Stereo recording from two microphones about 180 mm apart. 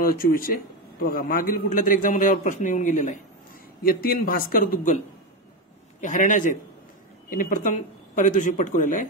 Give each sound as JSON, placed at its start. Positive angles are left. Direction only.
{"t": 0.0, "sound": "a man's voice", "side_deg": 55}